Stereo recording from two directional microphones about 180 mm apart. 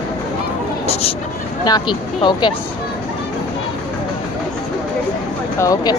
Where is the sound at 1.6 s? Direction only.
25° left (ahead or behind).